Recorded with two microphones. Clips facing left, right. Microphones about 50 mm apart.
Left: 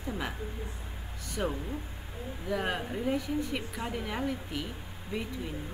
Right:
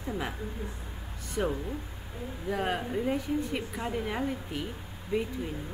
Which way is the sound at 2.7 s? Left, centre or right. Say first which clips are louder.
Right 1 dB; centre.